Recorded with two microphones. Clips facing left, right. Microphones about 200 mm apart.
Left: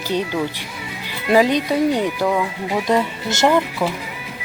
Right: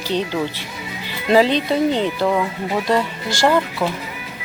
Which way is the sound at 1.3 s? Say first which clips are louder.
Even; 10° left (ahead or behind).